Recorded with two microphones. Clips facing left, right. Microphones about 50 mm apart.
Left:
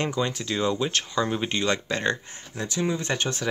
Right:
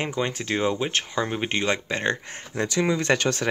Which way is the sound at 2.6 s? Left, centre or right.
Right.